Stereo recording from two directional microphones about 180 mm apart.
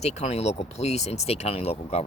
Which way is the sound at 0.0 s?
35° left (ahead or behind).